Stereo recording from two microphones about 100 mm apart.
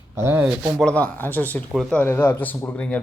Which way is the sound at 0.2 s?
20° right (ahead or behind).